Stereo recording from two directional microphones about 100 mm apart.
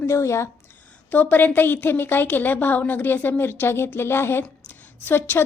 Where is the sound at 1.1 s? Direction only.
15° left (ahead or behind).